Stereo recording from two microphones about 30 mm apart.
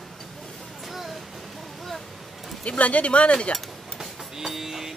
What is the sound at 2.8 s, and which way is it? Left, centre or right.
Speech, left.